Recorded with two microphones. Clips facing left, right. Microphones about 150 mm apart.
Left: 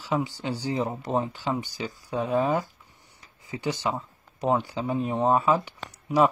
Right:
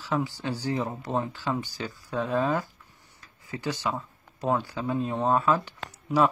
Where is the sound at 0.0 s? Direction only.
15° left (ahead or behind).